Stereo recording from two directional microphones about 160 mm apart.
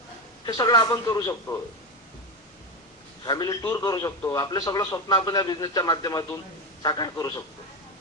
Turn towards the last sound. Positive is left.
turn(degrees=25)  # may be behind; listen again after turning